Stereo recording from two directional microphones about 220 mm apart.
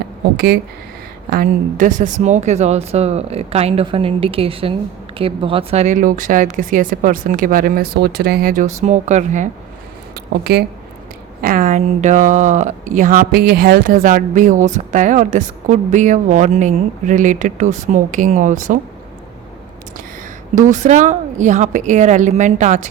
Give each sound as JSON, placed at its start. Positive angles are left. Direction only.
{"t": 0.3, "sound": "a woman's voice", "side_deg": -45}
{"t": 10.2, "sound": "speech", "side_deg": -45}
{"t": 11.4, "sound": "speech", "side_deg": -35}
{"t": 20.6, "sound": "speech", "side_deg": -35}